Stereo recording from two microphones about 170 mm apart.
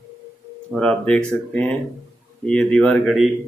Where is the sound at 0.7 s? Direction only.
5° left (ahead or behind).